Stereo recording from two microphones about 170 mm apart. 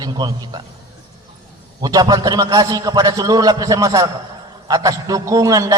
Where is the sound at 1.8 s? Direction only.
20° right (ahead or behind).